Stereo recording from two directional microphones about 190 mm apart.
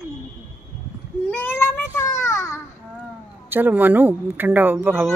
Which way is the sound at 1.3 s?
10° left (ahead or behind).